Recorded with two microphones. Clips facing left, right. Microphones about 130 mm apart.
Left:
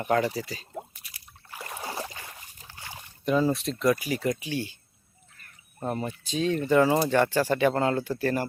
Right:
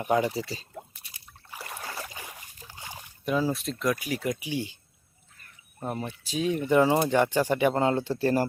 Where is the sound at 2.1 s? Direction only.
15° right (ahead or behind).